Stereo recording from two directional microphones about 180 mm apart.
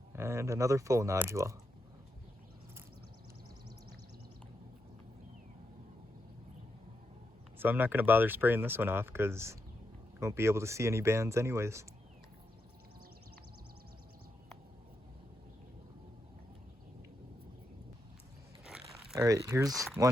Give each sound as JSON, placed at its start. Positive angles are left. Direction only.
{"t": 0.1, "sound": "speech", "side_deg": -15}
{"t": 7.6, "sound": "speech", "side_deg": -10}
{"t": 18.6, "sound": "biting", "side_deg": -5}
{"t": 19.5, "sound": "speech", "side_deg": -20}